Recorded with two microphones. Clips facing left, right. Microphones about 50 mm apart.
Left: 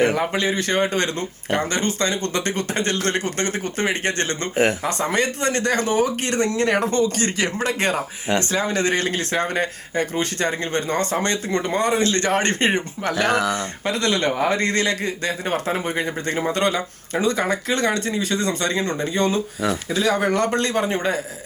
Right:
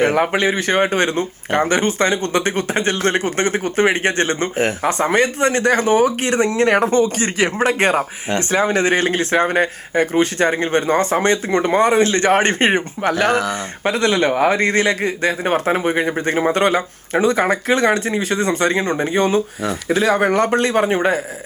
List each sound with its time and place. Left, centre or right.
0.1 s speech: right
13.2 s speech: centre
13.9 s speech: centre
14.3 s speech: right
14.5 s speech: centre